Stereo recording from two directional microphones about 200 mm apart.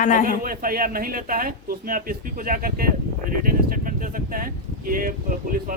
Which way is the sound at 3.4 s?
45° right (ahead or behind).